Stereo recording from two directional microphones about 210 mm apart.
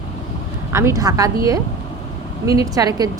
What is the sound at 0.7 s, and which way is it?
A woman's voice, 10° right (ahead or behind).